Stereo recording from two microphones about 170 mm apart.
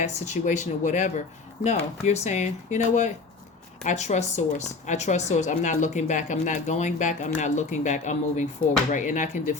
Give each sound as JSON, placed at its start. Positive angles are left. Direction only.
{"t": 0.0, "sound": "a woman's voice", "side_deg": 45}